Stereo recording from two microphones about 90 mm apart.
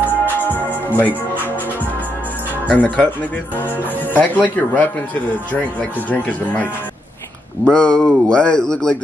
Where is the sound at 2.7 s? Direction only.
10° left (ahead or behind).